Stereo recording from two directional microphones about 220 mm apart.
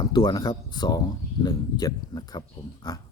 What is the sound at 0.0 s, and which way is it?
Speech, 20° left (ahead or behind).